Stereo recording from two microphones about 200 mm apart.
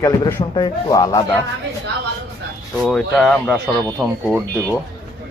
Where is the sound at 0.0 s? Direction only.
15° left (ahead or behind).